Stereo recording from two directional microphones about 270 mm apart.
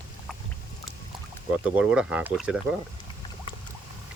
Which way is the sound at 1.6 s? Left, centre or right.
Centre.